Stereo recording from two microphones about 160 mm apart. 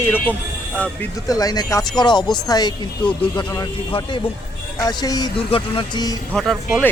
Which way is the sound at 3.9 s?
35° left (ahead or behind).